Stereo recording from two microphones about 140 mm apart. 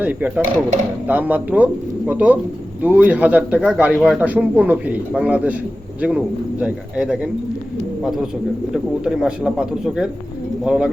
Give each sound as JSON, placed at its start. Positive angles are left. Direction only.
{"t": 0.0, "sound": "a man's voice", "side_deg": -10}
{"t": 8.7, "sound": "speech", "side_deg": -5}